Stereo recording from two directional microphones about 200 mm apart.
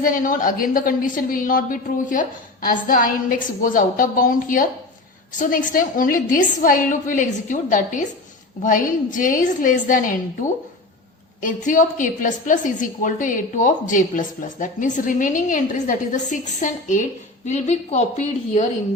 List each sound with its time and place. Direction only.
0.0 s a woman's voice: 45° left (ahead or behind)
11.3 s a woman's voice: 40° left (ahead or behind)